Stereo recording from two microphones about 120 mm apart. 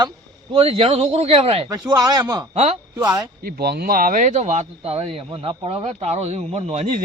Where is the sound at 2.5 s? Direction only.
65° right (ahead or behind).